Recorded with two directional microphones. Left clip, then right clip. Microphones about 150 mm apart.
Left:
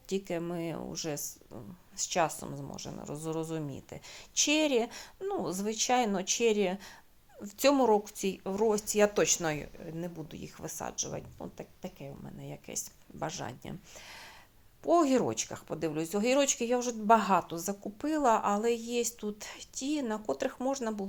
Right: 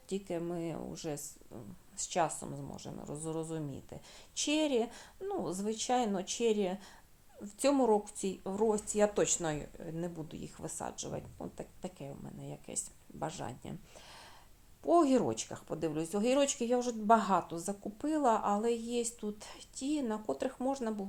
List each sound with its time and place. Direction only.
0.1 s speech: 15° left (ahead or behind)